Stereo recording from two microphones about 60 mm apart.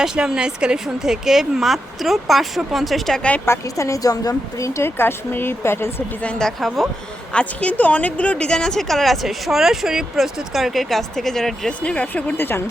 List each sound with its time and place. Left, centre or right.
0.0 s speech: centre
3.4 s speech: left
4.9 s speech: left
6.6 s a woman's voice: centre
7.3 s a woman's voice: left; by 11.7 s centre
11.8 s speech: left